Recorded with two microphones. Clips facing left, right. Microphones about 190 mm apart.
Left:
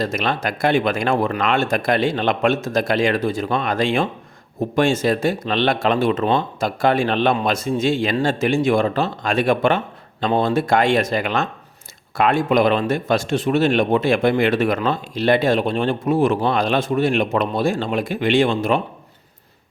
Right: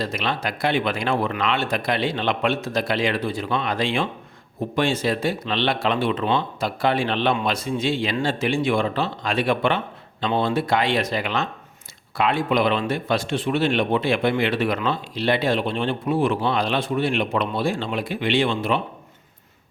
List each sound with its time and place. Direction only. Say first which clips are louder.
0.0 s speech: left 4 dB; 45° left (ahead or behind)